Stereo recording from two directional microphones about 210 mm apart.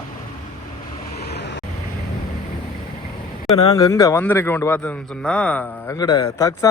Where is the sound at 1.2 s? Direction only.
55° left (ahead or behind).